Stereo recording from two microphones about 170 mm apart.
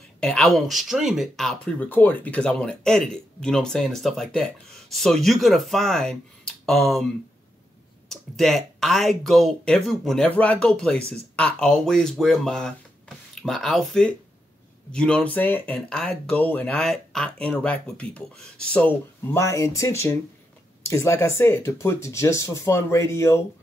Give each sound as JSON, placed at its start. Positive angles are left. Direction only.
{"t": 0.2, "sound": "speech", "side_deg": 5}
{"t": 8.1, "sound": "speech", "side_deg": 0}